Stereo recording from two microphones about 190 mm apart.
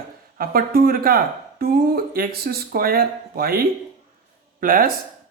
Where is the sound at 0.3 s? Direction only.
50° right (ahead or behind).